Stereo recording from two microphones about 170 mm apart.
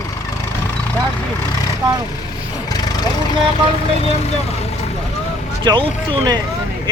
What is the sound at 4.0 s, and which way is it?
Speech, 40° left (ahead or behind).